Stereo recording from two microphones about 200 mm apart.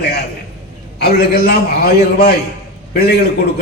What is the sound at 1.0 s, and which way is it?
A man's voice, 50° left (ahead or behind).